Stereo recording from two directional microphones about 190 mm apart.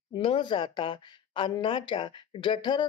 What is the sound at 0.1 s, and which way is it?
Speech, 25° left (ahead or behind).